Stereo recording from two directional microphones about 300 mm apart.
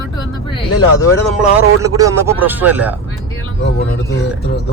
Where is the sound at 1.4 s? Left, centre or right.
Centre.